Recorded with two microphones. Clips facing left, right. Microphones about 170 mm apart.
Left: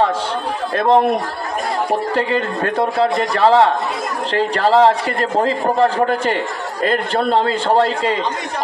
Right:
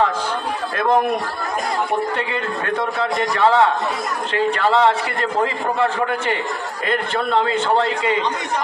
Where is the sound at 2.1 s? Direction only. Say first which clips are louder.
Left 5 dB; 35° left (ahead or behind).